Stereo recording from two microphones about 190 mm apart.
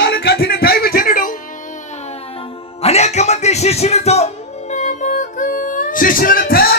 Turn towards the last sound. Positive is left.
turn(degrees=50)  # may be behind; listen again after turning